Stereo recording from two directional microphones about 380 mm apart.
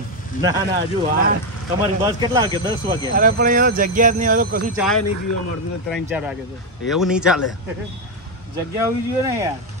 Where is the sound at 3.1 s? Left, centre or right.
Right.